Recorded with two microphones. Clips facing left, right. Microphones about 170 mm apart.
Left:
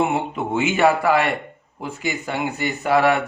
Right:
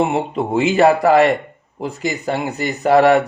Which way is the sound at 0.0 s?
35° right (ahead or behind).